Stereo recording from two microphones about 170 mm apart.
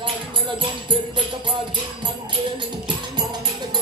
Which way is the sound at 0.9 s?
25° right (ahead or behind).